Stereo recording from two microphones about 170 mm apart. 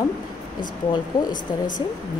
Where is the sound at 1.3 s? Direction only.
50° left (ahead or behind).